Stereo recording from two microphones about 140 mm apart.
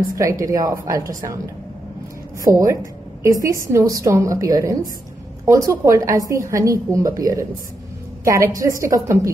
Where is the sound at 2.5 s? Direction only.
20° right (ahead or behind).